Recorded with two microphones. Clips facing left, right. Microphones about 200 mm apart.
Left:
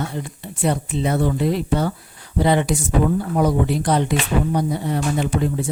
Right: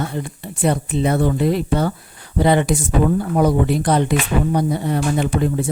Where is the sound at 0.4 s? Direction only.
55° right (ahead or behind).